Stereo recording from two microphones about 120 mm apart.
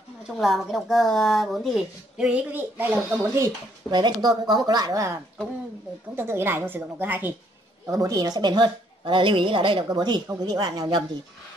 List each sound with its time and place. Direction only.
0.4 s speech: centre (ahead or behind); by 3.5 s 20° right (ahead or behind)
3.9 s a woman's voice: 35° right (ahead or behind)
6.1 s a woman's voice: 20° right (ahead or behind)
7.8 s a woman's voice: 30° right (ahead or behind)